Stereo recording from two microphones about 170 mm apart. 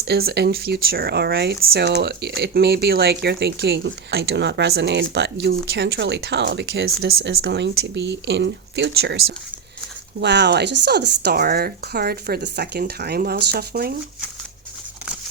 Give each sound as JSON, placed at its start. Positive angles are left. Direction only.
{"t": 0.0, "sound": "speech", "side_deg": -70}
{"t": 10.2, "sound": "speech", "side_deg": -90}